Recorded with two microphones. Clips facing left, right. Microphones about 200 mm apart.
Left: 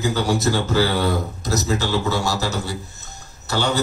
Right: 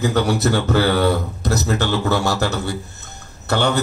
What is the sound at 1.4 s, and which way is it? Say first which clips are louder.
A man's voice: right 3 dB; 60° right (ahead or behind).